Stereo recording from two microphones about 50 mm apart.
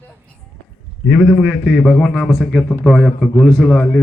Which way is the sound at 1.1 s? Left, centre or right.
Centre.